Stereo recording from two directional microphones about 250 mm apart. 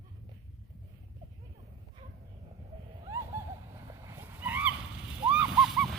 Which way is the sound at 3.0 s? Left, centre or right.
Centre.